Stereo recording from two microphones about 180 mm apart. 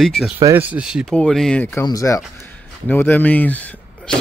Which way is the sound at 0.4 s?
15° right (ahead or behind).